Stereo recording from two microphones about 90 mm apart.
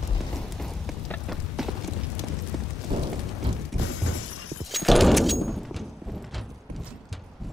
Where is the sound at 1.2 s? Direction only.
5° right (ahead or behind).